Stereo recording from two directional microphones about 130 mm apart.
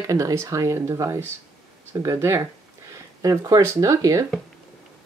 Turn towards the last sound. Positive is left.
turn(degrees=-25)  # may be behind; listen again after turning